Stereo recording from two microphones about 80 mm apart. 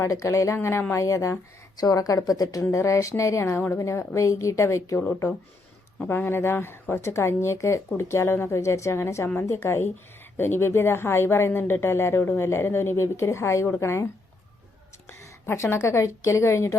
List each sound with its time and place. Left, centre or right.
0.0 s a woman's voice: left
2.6 s a woman's voice: left
15.4 s a woman's voice: left